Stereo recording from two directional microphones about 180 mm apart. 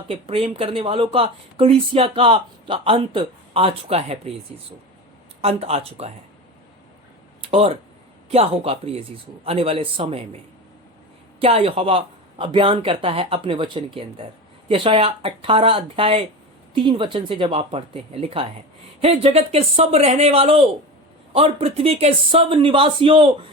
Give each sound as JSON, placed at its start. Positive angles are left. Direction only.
{"t": 0.1, "sound": "speech", "side_deg": -30}
{"t": 5.4, "sound": "speech", "side_deg": -35}
{"t": 7.4, "sound": "speech", "side_deg": -35}
{"t": 11.3, "sound": "speech", "side_deg": -30}